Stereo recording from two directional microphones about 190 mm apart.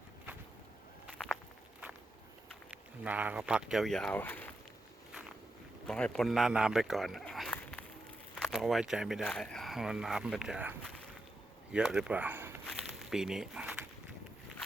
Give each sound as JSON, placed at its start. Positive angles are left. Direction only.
{"t": 2.6, "sound": "speech", "side_deg": -5}
{"t": 5.9, "sound": "speech", "side_deg": 5}
{"t": 12.6, "sound": "a sound", "side_deg": 0}